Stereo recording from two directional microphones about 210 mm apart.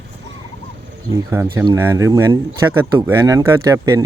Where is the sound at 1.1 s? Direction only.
10° right (ahead or behind).